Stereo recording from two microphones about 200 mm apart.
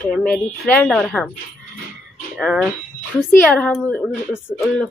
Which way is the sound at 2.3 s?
5° right (ahead or behind).